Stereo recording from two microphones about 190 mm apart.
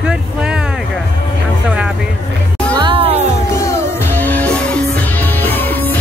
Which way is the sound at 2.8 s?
30° right (ahead or behind).